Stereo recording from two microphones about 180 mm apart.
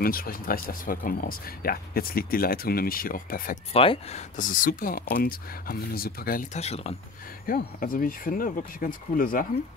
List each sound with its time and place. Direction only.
0.0 s speech: 55° left (ahead or behind)
3.7 s speech: 30° left (ahead or behind)
4.4 s speech: 45° left (ahead or behind)
7.4 s speech: 50° left (ahead or behind)